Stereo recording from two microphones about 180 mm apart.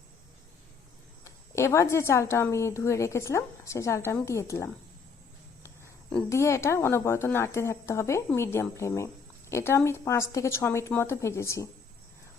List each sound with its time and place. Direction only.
1.2 s a woman's voice: 15° left (ahead or behind)
5.6 s a sound: 10° left (ahead or behind)
6.2 s a woman's voice: 15° left (ahead or behind)